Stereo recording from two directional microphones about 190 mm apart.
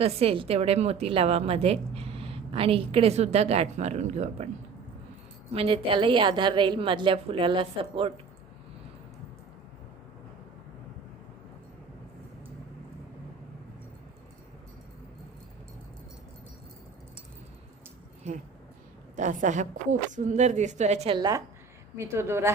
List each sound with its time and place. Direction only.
0.0 s a woman's voice: 30° right (ahead or behind)
5.5 s a woman's voice: 30° right (ahead or behind)
19.1 s a woman's voice: 40° right (ahead or behind)
21.2 s a woman's voice: 20° right (ahead or behind)